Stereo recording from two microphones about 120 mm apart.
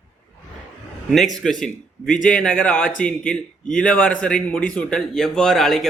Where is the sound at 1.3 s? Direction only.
5° left (ahead or behind).